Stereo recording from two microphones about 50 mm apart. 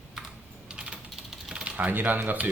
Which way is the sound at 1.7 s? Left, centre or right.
Right.